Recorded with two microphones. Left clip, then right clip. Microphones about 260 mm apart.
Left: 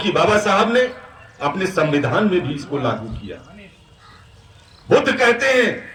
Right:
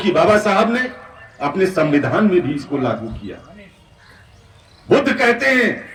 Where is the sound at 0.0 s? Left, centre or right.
Centre.